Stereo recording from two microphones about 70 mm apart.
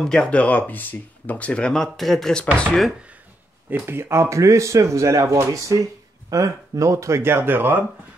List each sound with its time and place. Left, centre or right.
0.0 s speech: centre
3.7 s speech: right